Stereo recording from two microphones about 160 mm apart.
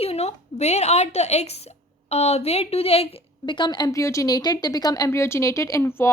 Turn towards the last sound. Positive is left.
turn(degrees=15)  # may be behind; listen again after turning